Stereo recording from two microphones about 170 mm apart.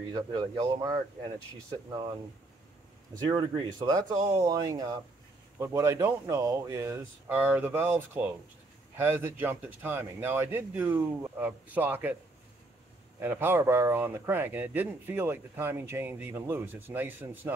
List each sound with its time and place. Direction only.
0.1 s speech: 25° right (ahead or behind)
3.3 s speech: 25° right (ahead or behind); by 12.2 s 10° right (ahead or behind)
13.2 s speech: 10° right (ahead or behind)